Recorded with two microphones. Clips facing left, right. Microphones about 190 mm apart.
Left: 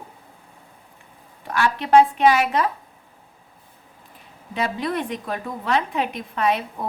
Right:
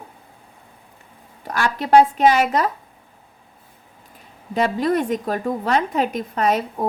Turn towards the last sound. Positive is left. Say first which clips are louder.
# right 3 dB
turn(degrees=-40)  # may be behind; listen again after turning